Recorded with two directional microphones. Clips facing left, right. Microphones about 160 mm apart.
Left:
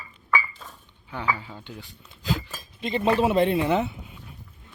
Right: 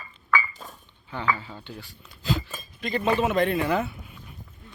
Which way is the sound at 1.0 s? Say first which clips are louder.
Right 1 dB; 10° left (ahead or behind).